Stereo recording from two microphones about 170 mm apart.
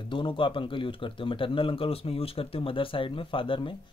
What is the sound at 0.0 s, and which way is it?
Speech, 30° left (ahead or behind).